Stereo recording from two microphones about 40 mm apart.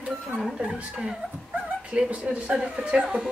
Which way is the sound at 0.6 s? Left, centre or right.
Right.